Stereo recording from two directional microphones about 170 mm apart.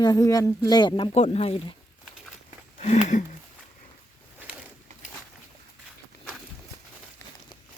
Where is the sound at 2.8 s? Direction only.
40° left (ahead or behind).